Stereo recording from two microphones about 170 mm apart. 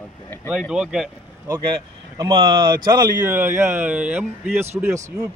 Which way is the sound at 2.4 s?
30° right (ahead or behind).